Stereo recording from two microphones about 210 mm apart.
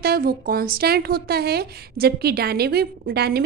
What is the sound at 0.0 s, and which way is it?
A woman's voice, 45° right (ahead or behind).